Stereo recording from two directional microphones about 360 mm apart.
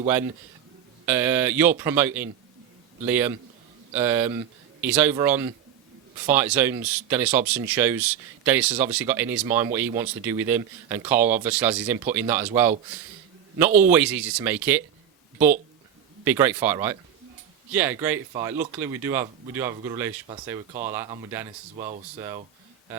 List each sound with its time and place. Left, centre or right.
1.0 s speech: centre
16.2 s speech: centre
21.8 s speech: centre
22.2 s speech: centre